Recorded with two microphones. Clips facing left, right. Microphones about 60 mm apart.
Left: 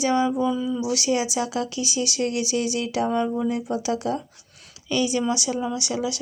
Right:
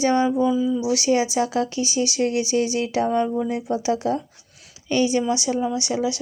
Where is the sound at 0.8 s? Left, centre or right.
Right.